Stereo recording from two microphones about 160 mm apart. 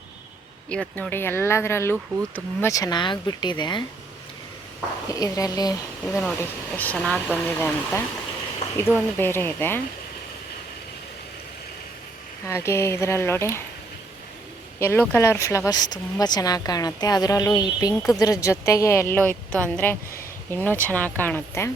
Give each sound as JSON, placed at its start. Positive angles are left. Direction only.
{"t": 0.7, "sound": "speech", "side_deg": 5}
{"t": 5.0, "sound": "speech", "side_deg": 20}
{"t": 6.1, "sound": "speech", "side_deg": 5}
{"t": 12.5, "sound": "speech", "side_deg": 15}
{"t": 14.8, "sound": "speech", "side_deg": 15}